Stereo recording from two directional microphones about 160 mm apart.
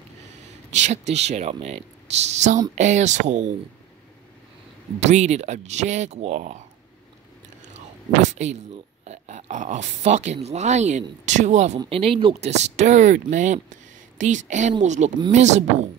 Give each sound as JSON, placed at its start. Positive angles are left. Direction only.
{"t": 0.7, "sound": "speech", "side_deg": -45}
{"t": 5.0, "sound": "speech", "side_deg": -45}
{"t": 8.2, "sound": "speech", "side_deg": -45}